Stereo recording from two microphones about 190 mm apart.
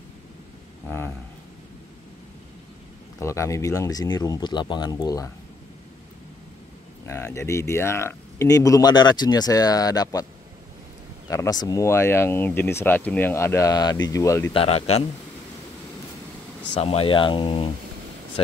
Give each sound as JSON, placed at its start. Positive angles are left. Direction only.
{"t": 0.8, "sound": "a sound", "side_deg": 10}
{"t": 3.2, "sound": "speech", "side_deg": 15}
{"t": 7.1, "sound": "speech", "side_deg": 15}
{"t": 11.2, "sound": "speech", "side_deg": 15}
{"t": 14.5, "sound": "speech", "side_deg": 30}
{"t": 16.7, "sound": "speech", "side_deg": 30}